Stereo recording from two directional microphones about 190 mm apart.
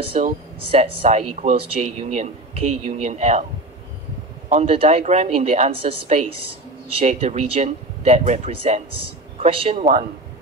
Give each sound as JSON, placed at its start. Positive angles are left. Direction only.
{"t": 0.0, "sound": "speech", "side_deg": -30}
{"t": 4.5, "sound": "speech", "side_deg": -35}